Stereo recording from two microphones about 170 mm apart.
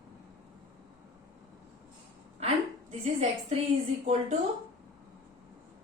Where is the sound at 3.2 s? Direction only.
45° right (ahead or behind).